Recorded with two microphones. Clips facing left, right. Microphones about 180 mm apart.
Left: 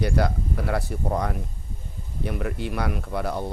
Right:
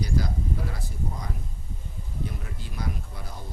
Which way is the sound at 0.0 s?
70° left (ahead or behind).